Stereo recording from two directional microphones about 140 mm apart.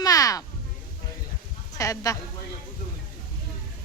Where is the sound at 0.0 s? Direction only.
25° left (ahead or behind).